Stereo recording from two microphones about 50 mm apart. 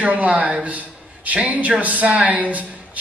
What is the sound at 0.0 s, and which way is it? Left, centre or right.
A man's voice, right.